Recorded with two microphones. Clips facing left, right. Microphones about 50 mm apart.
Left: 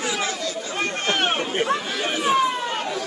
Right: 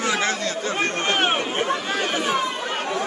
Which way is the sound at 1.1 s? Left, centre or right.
Centre.